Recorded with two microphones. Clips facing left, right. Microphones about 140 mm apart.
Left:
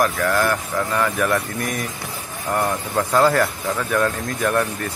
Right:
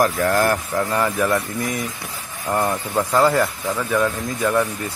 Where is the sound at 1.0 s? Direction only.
20° right (ahead or behind).